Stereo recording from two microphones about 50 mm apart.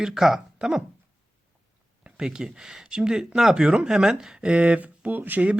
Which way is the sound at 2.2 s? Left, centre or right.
Centre.